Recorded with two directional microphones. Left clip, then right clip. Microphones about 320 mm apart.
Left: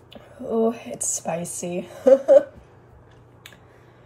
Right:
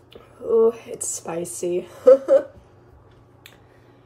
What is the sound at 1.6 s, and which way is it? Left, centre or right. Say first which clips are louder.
Speech: right 5 dB; centre.